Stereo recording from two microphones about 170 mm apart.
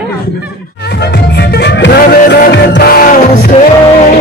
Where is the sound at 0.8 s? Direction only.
75° left (ahead or behind); by 3.5 s 60° left (ahead or behind).